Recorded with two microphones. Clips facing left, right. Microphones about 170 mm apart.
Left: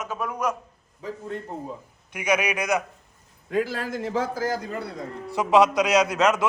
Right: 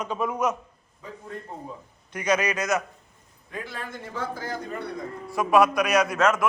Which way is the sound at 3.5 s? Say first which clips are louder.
Left 10 dB; 90° left.